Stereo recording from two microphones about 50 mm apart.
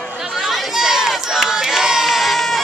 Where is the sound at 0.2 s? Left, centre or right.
Centre.